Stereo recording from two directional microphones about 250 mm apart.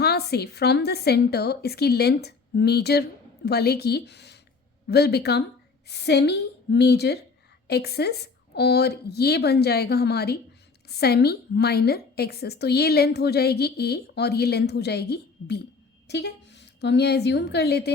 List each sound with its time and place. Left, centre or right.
0.0 s a woman's voice: left